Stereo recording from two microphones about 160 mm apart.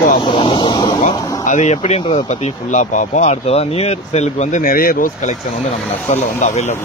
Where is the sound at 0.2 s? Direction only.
30° left (ahead or behind).